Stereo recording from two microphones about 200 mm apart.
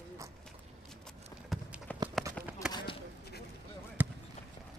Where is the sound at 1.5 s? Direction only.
Centre (ahead or behind).